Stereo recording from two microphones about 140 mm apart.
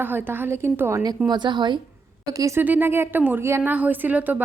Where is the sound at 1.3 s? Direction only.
30° right (ahead or behind).